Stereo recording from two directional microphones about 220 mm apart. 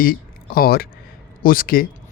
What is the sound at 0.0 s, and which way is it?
Speech, 40° left (ahead or behind).